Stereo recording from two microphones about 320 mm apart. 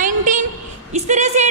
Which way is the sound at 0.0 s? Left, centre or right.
Right.